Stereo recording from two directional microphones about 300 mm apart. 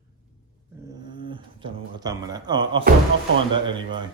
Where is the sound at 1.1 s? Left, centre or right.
Centre.